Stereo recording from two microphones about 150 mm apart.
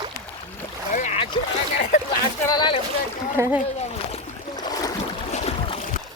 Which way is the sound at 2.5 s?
30° left (ahead or behind).